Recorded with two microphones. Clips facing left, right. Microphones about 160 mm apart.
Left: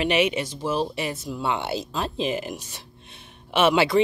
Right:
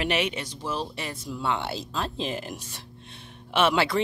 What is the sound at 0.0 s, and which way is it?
Speech, 5° left (ahead or behind).